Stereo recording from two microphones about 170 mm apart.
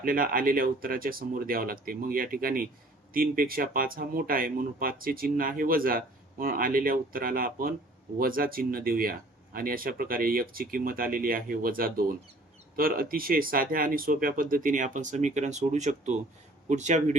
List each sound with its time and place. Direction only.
0.0 s speech: 55° right (ahead or behind)